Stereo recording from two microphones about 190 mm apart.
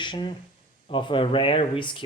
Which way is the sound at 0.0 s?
25° left (ahead or behind).